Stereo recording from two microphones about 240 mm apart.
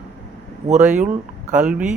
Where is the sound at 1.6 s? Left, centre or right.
Centre.